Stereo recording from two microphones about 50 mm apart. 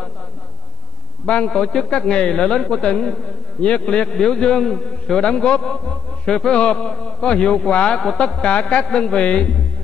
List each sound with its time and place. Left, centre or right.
1.2 s a man's voice: centre
1.5 s a man's voice: centre
3.6 s a man's voice: left